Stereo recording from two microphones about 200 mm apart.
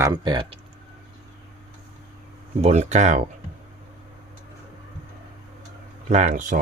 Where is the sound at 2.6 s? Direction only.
35° right (ahead or behind).